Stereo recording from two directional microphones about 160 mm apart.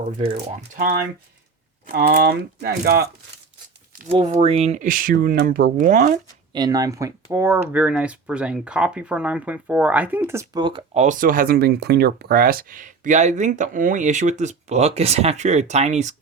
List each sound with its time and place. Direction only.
0.3 s speech: 50° right (ahead or behind)
1.9 s speech: 65° right (ahead or behind); by 3.1 s 85° right
4.4 s speech: 40° right (ahead or behind); by 6.1 s 55° right (ahead or behind)
6.5 s speech: 25° right (ahead or behind)
10.6 s speech: 30° right (ahead or behind)
10.9 s speech: 50° right (ahead or behind)